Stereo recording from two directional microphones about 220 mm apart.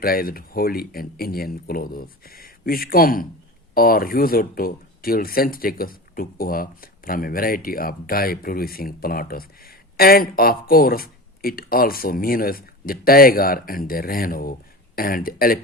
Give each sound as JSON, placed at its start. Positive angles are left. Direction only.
{"t": 0.0, "sound": "speech", "side_deg": 40}